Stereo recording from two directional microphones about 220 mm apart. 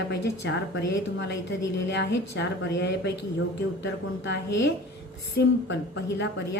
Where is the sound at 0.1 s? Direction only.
55° left (ahead or behind).